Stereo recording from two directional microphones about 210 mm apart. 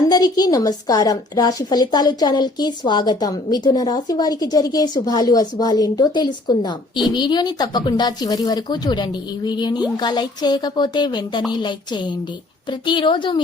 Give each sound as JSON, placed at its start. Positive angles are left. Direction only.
{"t": 0.1, "sound": "a woman's voice", "side_deg": 20}